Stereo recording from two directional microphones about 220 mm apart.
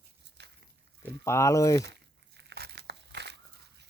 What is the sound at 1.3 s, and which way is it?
Speech, 15° left (ahead or behind).